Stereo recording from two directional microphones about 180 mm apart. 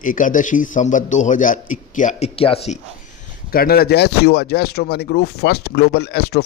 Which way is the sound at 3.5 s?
55° left (ahead or behind).